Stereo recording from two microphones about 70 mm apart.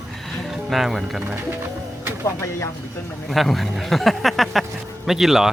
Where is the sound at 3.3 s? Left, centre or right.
Centre.